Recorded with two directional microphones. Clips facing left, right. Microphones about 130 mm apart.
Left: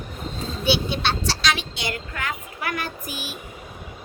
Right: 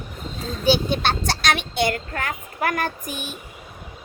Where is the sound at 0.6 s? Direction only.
45° right (ahead or behind).